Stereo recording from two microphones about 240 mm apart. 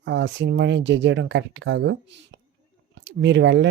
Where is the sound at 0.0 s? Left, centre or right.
Right.